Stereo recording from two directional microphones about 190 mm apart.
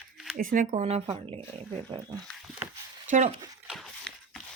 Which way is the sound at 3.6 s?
Centre (ahead or behind).